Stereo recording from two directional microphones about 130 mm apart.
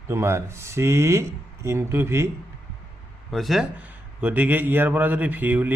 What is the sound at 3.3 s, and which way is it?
A man's voice, centre (ahead or behind).